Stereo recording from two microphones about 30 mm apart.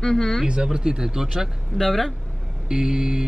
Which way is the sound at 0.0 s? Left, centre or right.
Centre.